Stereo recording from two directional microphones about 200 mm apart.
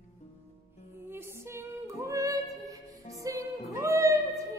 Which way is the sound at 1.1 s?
10° right (ahead or behind).